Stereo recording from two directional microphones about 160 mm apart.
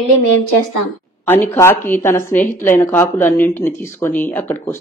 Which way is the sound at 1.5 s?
15° left (ahead or behind).